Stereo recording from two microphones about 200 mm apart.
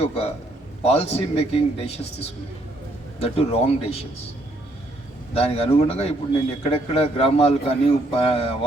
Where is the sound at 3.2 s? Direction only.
30° left (ahead or behind).